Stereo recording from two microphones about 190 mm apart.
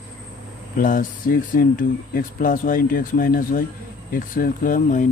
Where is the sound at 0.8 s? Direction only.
45° left (ahead or behind).